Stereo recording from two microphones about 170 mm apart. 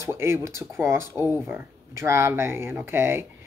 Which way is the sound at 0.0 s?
15° right (ahead or behind).